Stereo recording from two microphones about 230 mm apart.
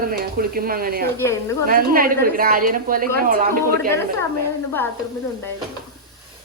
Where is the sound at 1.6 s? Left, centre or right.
Right.